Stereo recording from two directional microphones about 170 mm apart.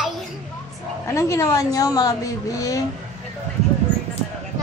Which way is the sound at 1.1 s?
15° left (ahead or behind).